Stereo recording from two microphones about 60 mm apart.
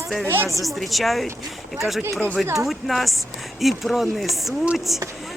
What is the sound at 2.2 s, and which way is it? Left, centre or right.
Speech, left.